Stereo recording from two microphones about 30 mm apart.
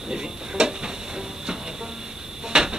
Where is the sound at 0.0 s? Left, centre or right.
Right.